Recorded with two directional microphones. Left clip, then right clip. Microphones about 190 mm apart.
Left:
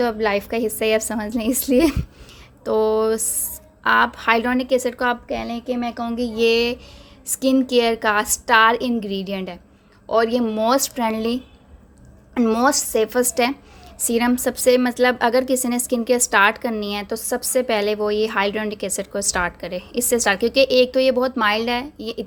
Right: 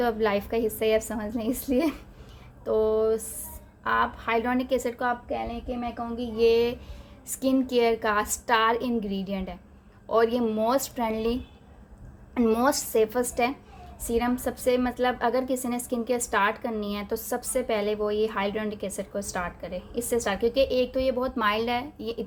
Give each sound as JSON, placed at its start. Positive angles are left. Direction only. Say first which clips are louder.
{"t": 0.0, "sound": "a woman's voice", "louder": "left 5 dB", "side_deg": 30}
{"t": 5.0, "sound": "a woman's voice", "louder": "left 6 dB", "side_deg": 50}